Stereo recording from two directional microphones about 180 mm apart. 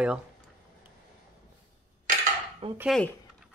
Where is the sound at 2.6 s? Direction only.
30° right (ahead or behind).